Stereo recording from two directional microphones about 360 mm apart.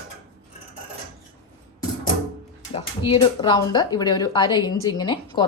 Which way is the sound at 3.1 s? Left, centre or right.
Centre.